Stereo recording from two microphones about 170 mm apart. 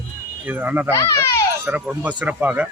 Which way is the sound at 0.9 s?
15° left (ahead or behind).